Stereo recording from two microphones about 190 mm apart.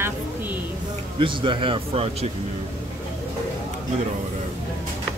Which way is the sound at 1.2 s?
25° right (ahead or behind).